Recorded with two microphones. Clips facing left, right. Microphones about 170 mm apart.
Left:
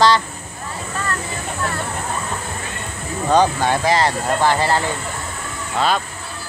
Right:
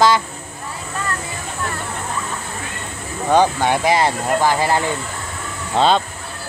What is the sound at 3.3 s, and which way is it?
Speech, 15° right (ahead or behind).